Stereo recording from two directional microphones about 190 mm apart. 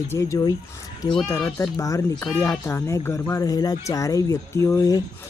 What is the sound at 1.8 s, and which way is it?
Speech, 15° left (ahead or behind).